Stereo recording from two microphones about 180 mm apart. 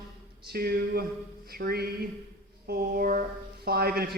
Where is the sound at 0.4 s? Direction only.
55° right (ahead or behind).